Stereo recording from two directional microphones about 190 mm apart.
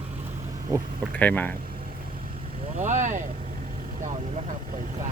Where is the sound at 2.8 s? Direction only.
40° right (ahead or behind).